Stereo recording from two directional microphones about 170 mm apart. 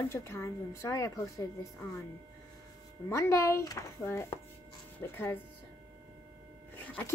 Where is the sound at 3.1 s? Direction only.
15° left (ahead or behind).